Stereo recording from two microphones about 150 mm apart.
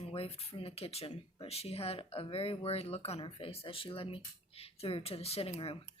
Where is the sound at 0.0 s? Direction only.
40° left (ahead or behind).